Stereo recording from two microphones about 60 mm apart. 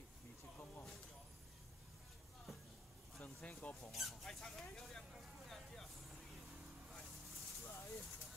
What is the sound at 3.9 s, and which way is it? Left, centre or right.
Speech, centre.